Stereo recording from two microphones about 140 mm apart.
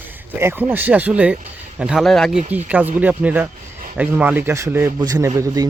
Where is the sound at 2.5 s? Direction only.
10° right (ahead or behind).